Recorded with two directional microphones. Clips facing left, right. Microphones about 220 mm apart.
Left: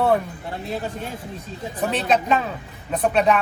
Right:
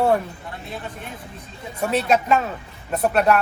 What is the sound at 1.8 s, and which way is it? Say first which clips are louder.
Speech: right 1 dB; 10° right (ahead or behind).